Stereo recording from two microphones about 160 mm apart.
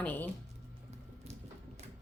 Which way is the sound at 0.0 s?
10° left (ahead or behind).